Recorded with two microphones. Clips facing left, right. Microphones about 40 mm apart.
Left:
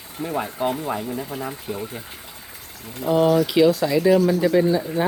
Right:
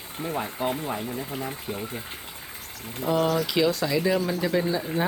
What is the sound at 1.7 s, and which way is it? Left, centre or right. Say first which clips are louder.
Speech: left 4 dB; centre.